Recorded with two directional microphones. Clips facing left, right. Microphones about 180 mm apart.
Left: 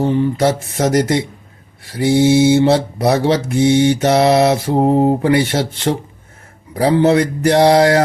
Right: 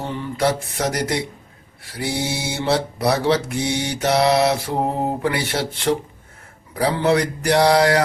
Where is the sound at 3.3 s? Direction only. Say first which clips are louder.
Left 7 dB; 25° left (ahead or behind).